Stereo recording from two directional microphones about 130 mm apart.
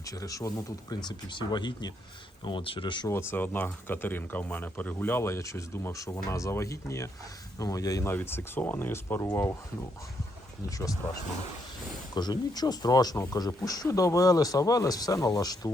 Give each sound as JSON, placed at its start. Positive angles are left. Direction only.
{"t": 0.0, "sound": "speech", "side_deg": 25}
{"t": 3.1, "sound": "speech", "side_deg": 20}
{"t": 10.7, "sound": "speech", "side_deg": 25}
{"t": 12.1, "sound": "speech", "side_deg": 30}